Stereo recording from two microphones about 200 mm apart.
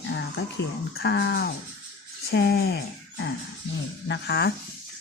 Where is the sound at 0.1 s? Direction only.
55° left (ahead or behind).